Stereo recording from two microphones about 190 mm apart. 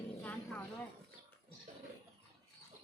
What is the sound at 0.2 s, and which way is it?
Vehicle, 10° left (ahead or behind).